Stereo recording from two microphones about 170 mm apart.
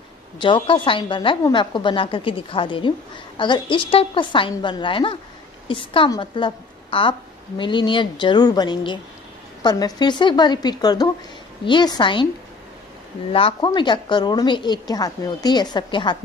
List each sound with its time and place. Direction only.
0.4 s a woman's voice: 30° left (ahead or behind)
13.3 s a woman's voice: 35° left (ahead or behind)